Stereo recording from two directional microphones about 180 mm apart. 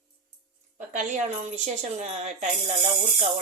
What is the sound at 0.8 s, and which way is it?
A woman's voice, 45° right (ahead or behind).